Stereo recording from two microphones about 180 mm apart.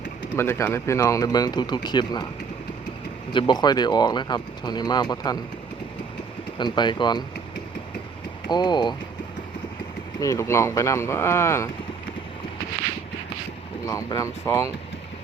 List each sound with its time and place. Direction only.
0.3 s speech: 15° left (ahead or behind)
3.3 s speech: 25° left (ahead or behind)
6.6 s speech: 25° left (ahead or behind)
8.4 s speech: 25° left (ahead or behind)
10.2 s speech: 15° left (ahead or behind)
13.8 s speech: 20° left (ahead or behind)